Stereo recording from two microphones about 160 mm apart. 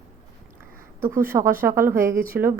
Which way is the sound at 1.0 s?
15° right (ahead or behind).